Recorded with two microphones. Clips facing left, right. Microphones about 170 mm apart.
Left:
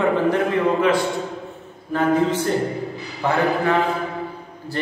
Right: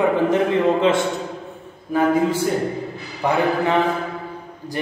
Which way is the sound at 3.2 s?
15° right (ahead or behind).